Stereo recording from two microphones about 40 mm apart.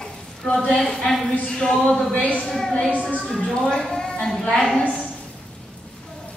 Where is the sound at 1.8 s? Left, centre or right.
Left.